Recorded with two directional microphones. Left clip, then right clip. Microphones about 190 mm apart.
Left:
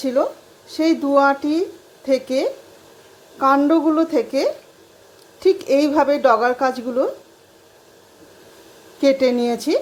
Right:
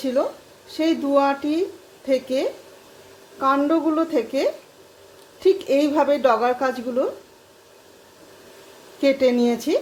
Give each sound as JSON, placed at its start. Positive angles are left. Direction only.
{"t": 0.0, "sound": "a woman's voice", "side_deg": 15}
{"t": 9.0, "sound": "a woman's voice", "side_deg": 20}